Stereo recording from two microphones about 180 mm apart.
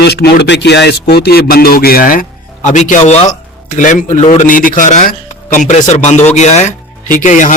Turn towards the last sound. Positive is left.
turn(degrees=45)  # may be behind; listen again after turning